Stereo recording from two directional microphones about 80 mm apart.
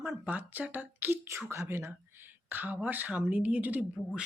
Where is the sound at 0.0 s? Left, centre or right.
Right.